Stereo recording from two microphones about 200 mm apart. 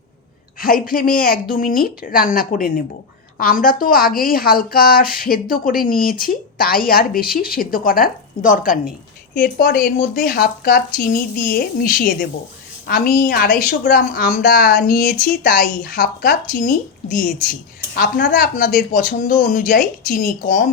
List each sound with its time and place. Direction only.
0.6 s a woman's voice: 45° left (ahead or behind)